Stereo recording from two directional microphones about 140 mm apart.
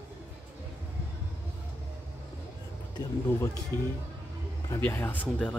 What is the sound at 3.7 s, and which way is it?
Speech, 30° right (ahead or behind).